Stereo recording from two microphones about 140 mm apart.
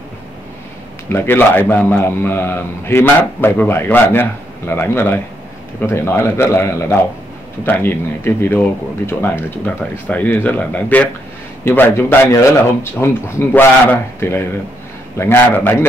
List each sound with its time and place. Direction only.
1.0 s a man's voice: 15° left (ahead or behind)